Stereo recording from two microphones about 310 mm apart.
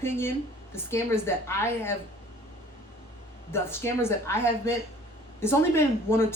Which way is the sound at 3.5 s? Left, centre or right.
Centre.